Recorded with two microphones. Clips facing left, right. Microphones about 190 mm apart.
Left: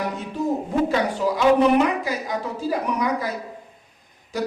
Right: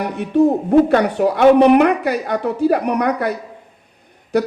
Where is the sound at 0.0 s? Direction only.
65° right (ahead or behind).